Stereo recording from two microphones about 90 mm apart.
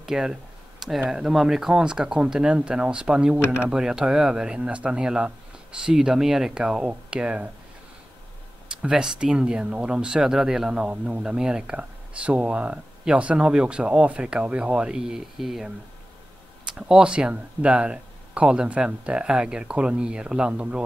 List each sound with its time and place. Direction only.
0.0 s a sound: 5° right (ahead or behind)
1.0 s speech: 5° right (ahead or behind)
8.6 s speech: 10° right (ahead or behind)
16.7 s speech: 10° right (ahead or behind)